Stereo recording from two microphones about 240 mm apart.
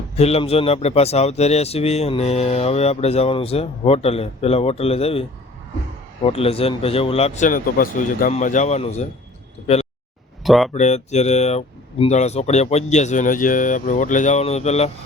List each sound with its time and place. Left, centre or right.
0.2 s speech: left
6.2 s speech: left
10.4 s speech: centre
10.8 s speech: left